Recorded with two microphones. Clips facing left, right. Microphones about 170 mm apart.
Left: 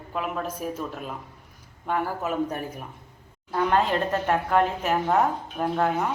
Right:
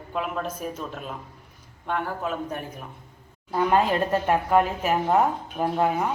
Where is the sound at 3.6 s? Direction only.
10° right (ahead or behind).